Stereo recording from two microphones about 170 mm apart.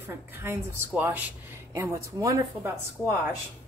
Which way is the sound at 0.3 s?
15° right (ahead or behind).